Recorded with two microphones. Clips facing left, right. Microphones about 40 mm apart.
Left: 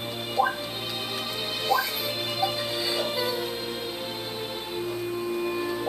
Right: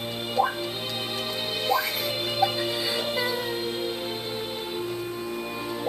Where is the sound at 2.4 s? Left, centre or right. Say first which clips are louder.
Right 4 dB; centre.